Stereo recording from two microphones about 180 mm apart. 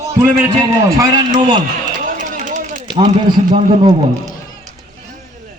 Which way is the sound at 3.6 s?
40° right (ahead or behind).